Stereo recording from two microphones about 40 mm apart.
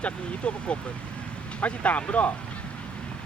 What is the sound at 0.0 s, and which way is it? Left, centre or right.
Speech, left.